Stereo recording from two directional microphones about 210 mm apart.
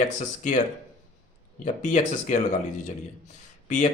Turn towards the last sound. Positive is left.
turn(degrees=35)  # may be behind; listen again after turning